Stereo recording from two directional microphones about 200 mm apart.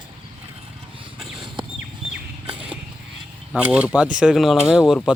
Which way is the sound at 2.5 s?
25° right (ahead or behind).